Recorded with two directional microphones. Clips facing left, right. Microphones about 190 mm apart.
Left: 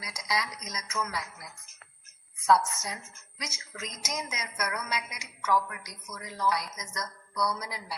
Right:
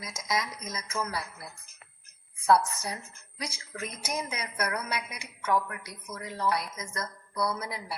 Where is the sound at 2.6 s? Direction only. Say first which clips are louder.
Right 2 dB; 35° right (ahead or behind).